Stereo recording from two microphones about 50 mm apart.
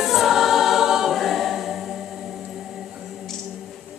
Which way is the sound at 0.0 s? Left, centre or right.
Centre.